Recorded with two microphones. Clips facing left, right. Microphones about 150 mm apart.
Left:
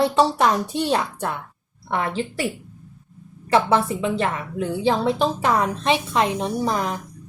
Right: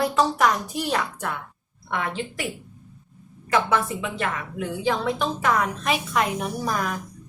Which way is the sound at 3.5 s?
30° left (ahead or behind).